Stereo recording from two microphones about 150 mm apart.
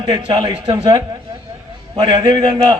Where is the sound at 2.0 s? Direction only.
35° right (ahead or behind).